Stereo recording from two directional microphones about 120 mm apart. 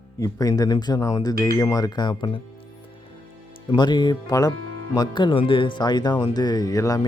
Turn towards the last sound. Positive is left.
turn(degrees=30)  # may be behind; listen again after turning